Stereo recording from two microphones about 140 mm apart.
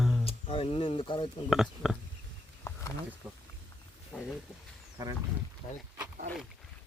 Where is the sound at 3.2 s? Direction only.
Centre (ahead or behind).